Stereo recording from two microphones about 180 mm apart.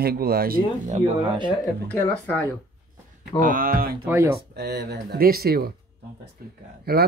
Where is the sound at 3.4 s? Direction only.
50° right (ahead or behind).